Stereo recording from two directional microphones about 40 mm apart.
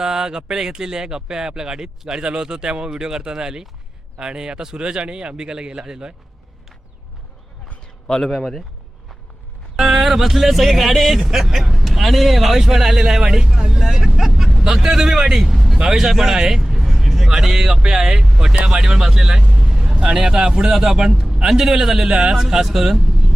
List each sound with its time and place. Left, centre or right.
0.0 s speech: centre
8.0 s speech: centre
8.3 s speech: centre
9.7 s speech: centre
14.3 s vehicle: centre
14.6 s speech: centre
18.5 s speech: right
18.8 s speech: centre
19.4 s vehicle: right
19.6 s vehicle: centre
20.1 s speech: centre